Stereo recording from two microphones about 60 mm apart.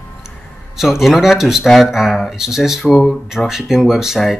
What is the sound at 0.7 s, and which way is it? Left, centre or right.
Speech, centre.